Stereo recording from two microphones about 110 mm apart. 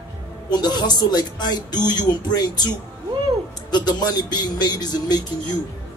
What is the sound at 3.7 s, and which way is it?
Speech, 40° left (ahead or behind).